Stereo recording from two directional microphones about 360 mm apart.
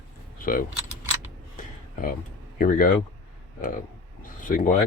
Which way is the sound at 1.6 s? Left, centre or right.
Left.